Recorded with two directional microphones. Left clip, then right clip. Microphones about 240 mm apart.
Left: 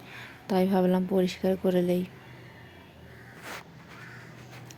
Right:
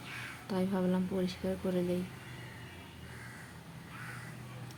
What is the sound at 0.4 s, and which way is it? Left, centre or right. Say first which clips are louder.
Speech: left 10 dB; left.